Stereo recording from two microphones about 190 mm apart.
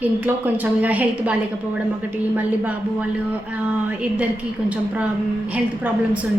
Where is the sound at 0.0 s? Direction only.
10° right (ahead or behind).